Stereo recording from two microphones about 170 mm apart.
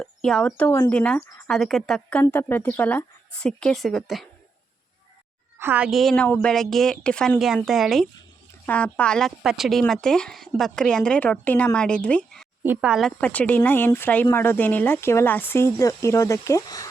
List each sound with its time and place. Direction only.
0.0 s speech: 5° left (ahead or behind)
5.5 s speech: 10° right (ahead or behind); by 12.5 s 5° left (ahead or behind)
12.6 s speech: 10° right (ahead or behind); by 16.8 s 20° left (ahead or behind)